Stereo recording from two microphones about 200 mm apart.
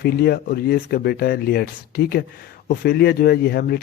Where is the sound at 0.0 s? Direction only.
50° left (ahead or behind).